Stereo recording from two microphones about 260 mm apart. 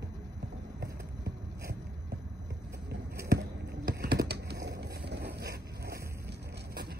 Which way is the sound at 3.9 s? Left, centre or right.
Right.